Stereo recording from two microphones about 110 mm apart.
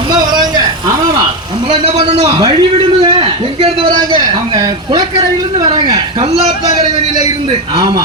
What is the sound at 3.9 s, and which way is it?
A man's voice, 40° right (ahead or behind).